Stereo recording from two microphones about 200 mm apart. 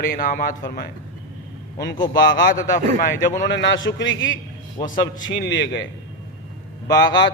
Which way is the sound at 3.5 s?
65° left (ahead or behind).